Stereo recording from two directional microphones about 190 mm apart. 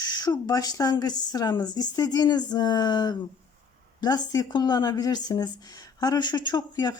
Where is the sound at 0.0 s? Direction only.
20° left (ahead or behind).